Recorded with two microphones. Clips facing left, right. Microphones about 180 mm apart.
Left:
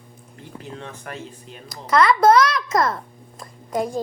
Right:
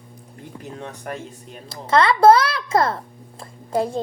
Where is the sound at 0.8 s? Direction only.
50° right (ahead or behind).